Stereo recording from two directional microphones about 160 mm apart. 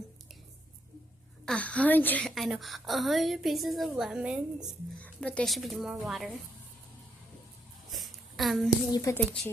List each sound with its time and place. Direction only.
1.5 s a woman's voice: 10° left (ahead or behind); by 4.7 s 5° right (ahead or behind)
4.9 s a woman's voice: 10° left (ahead or behind)
7.9 s a sound: centre (ahead or behind)
8.9 s speech: 20° left (ahead or behind)